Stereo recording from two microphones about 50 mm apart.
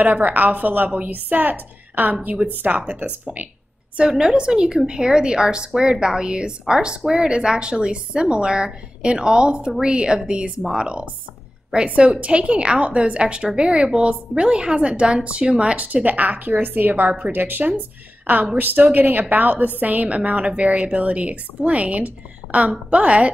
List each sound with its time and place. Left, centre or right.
0.0 s a woman's voice: right
3.9 s a woman's voice: centre